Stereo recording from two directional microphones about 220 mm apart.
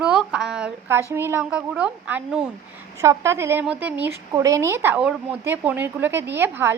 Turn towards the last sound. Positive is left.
turn(degrees=-10)  # may be behind; listen again after turning